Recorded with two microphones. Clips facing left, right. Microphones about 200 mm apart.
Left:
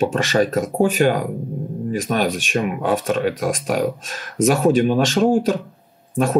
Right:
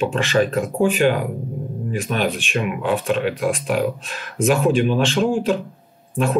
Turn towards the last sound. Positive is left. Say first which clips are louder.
# left 2 dB
turn(degrees=40)  # may be behind; listen again after turning